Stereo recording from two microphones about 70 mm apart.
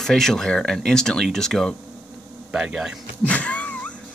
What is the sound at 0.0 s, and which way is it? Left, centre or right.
Speech, centre.